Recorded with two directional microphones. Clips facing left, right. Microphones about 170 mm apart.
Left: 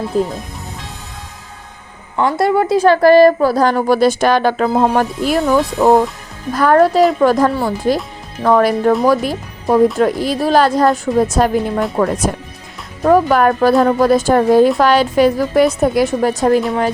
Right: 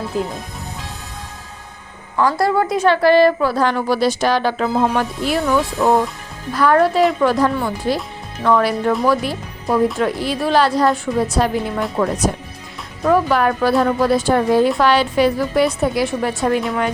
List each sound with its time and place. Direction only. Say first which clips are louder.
2.1 s a woman's voice: left 2 dB; 25° left (ahead or behind); by 16.6 s 40° left (ahead or behind)